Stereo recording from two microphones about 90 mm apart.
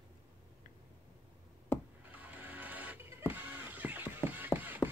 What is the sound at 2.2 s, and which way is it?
Music, 20° right (ahead or behind).